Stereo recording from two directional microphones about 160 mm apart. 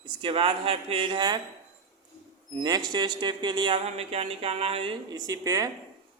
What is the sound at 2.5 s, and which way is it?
Speech, 25° right (ahead or behind).